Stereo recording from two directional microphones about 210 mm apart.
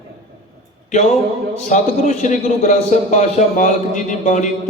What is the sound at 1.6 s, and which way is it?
A man's voice, 35° left (ahead or behind).